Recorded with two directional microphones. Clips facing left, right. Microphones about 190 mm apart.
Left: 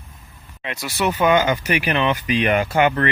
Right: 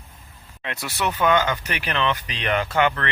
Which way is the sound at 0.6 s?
Centre (ahead or behind).